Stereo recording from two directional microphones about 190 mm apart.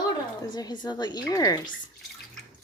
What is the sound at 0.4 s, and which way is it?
A woman's voice, 25° left (ahead or behind).